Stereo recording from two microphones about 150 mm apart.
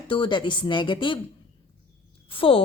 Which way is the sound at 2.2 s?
35° left (ahead or behind).